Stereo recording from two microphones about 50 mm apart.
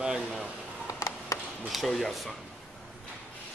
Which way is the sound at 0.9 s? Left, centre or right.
Left.